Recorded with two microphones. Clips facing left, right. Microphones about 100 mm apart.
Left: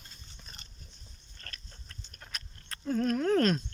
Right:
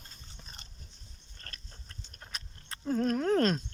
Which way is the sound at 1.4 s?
35° right (ahead or behind).